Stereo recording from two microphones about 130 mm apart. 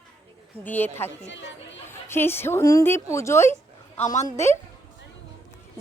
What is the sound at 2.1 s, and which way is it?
Speech, 15° left (ahead or behind).